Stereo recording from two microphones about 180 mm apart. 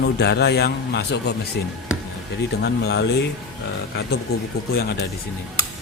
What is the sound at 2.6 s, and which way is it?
Speech, 70° left (ahead or behind).